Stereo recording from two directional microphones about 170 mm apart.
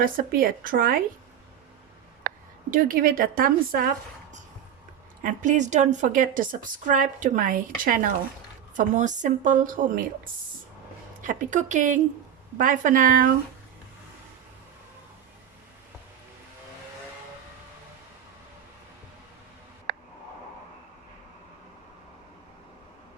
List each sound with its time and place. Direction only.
0.0 s a woman's voice: 55° right (ahead or behind)
2.3 s a sound: 65° right (ahead or behind)
2.6 s a woman's voice: 55° right (ahead or behind)
5.2 s a woman's voice: 50° right (ahead or behind)
11.2 s a woman's voice: 50° right (ahead or behind)